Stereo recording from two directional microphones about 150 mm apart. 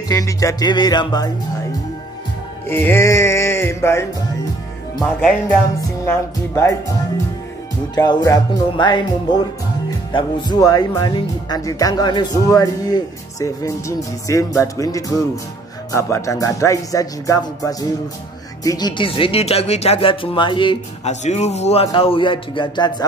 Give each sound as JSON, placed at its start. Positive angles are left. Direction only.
{"t": 0.1, "sound": "speech", "side_deg": 20}
{"t": 2.7, "sound": "music", "side_deg": 15}
{"t": 6.0, "sound": "music", "side_deg": 15}
{"t": 7.9, "sound": "speech", "side_deg": 25}
{"t": 21.1, "sound": "speech", "side_deg": 50}